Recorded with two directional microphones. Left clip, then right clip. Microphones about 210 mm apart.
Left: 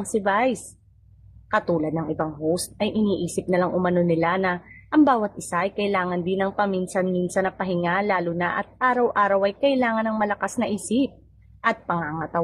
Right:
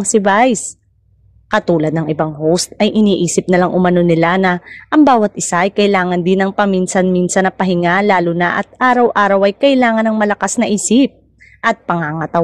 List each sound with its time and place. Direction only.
0.1 s a woman's voice: 40° right (ahead or behind)